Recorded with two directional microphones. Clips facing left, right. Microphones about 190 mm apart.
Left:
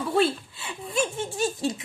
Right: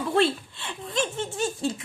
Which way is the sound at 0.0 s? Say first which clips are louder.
Even; 5° left (ahead or behind).